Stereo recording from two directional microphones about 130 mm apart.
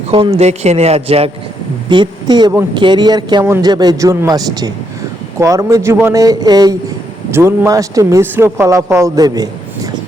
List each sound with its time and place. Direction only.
0.1 s a man's voice: 45° right (ahead or behind)
1.9 s a woman's voice: 35° right (ahead or behind)
7.3 s a man's voice: 20° right (ahead or behind)